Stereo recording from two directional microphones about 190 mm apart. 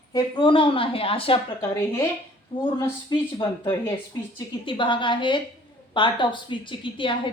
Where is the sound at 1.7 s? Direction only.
15° left (ahead or behind).